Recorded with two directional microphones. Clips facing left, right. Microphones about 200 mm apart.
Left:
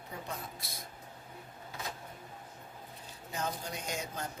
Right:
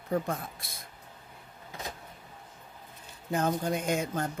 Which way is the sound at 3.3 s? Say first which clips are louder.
Right 10 dB; 55° right (ahead or behind).